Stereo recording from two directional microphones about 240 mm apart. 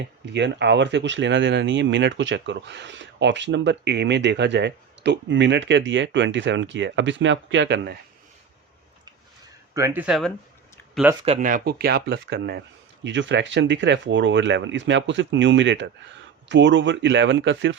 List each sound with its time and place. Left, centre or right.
0.0 s speech: right
9.7 s speech: centre
11.2 s speech: right